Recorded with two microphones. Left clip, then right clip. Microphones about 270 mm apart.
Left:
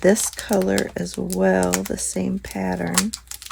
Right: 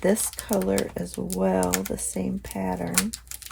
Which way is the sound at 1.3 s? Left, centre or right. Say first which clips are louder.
Left 5 dB; left.